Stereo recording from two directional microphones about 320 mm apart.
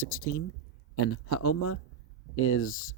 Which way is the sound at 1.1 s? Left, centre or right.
Left.